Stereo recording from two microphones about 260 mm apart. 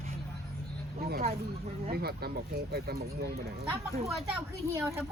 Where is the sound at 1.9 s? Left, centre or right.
Right.